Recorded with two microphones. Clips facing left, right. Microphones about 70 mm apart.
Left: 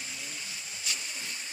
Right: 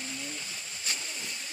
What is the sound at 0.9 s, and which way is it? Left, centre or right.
Vehicle, right.